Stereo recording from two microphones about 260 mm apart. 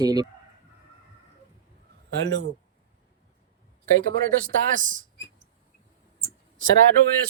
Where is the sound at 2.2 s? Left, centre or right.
Right.